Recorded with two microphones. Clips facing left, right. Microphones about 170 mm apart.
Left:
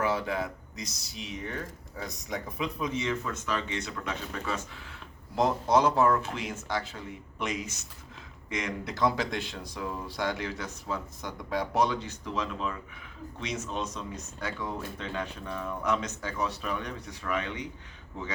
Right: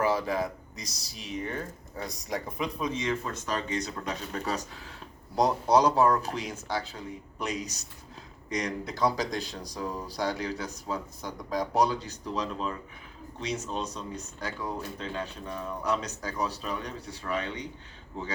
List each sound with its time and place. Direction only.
0.0 s speech: 35° right (ahead or behind)
2.3 s speech: 35° right (ahead or behind)